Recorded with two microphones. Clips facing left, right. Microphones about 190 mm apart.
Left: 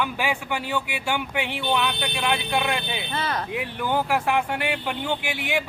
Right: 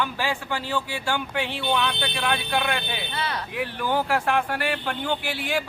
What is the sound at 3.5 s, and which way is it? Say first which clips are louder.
Speech: right 2 dB; 20° left (ahead or behind).